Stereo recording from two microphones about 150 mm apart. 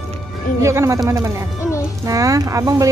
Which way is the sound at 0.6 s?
20° right (ahead or behind).